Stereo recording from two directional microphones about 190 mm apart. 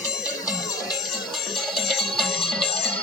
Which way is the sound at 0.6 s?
20° left (ahead or behind).